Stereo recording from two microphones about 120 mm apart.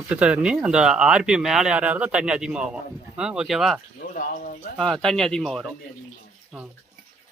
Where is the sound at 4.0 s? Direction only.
90° left.